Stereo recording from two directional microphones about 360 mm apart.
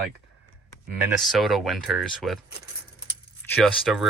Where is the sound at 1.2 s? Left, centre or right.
Centre.